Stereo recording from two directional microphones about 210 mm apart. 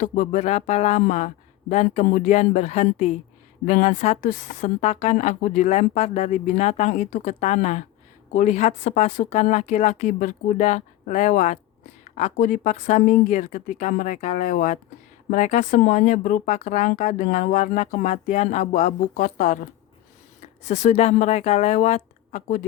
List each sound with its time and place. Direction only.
0.0 s speech: 40° left (ahead or behind)